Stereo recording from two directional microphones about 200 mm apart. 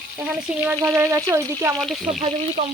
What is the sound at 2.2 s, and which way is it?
Speech, 35° right (ahead or behind).